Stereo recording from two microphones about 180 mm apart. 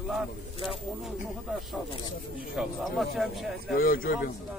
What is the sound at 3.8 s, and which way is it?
Speech, 55° left (ahead or behind).